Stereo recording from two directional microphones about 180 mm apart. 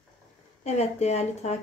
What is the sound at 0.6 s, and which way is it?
Speech, 35° left (ahead or behind).